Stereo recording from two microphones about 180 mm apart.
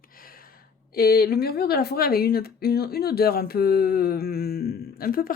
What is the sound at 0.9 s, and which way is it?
Speech, 60° left (ahead or behind).